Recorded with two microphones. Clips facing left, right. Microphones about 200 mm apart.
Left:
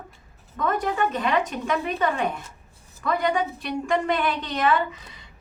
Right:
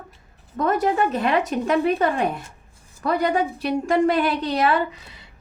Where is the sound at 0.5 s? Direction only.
40° right (ahead or behind).